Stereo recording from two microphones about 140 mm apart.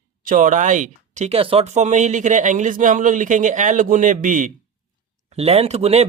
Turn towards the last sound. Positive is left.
turn(degrees=-50)  # may be behind; listen again after turning